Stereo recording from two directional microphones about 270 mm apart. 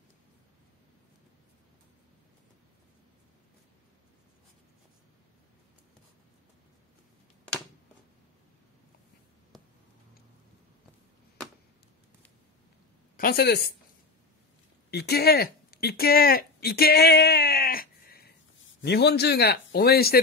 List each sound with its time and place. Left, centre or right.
13.1 s speech: left
14.9 s a man's voice: left